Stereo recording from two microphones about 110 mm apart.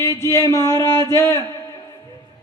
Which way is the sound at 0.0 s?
25° left (ahead or behind).